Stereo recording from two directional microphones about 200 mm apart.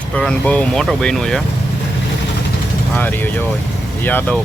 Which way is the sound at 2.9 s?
10° left (ahead or behind).